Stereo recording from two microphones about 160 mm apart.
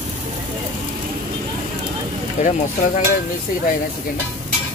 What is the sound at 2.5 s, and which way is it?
Stir, 50° left (ahead or behind).